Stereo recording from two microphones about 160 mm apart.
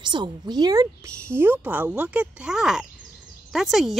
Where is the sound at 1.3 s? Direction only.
10° right (ahead or behind).